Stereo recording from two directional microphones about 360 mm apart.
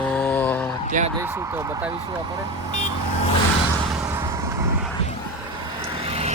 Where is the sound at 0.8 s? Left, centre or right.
Right.